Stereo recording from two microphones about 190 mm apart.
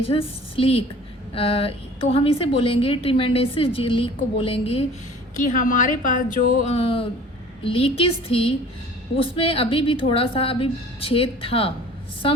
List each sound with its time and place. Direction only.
0.0 s a woman's voice: 30° left (ahead or behind)
5.5 s speech: 40° left (ahead or behind)
6.7 s a woman's voice: 30° left (ahead or behind)